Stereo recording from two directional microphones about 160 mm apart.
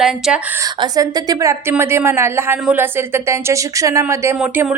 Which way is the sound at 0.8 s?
25° right (ahead or behind).